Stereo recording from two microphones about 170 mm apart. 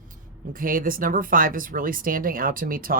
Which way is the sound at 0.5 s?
55° right (ahead or behind).